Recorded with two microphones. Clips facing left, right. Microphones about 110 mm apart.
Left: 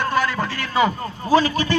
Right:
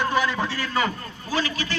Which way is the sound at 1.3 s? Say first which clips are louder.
Left 10 dB; 40° left (ahead or behind).